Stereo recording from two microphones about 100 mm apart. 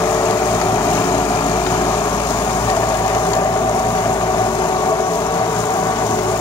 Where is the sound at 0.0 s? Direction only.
35° left (ahead or behind).